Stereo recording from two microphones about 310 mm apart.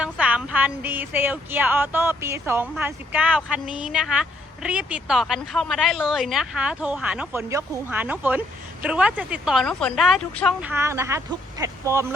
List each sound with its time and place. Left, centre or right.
0.0 s speech: centre